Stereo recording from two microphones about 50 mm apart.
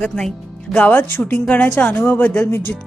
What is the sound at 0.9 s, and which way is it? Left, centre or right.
A woman's voice, left.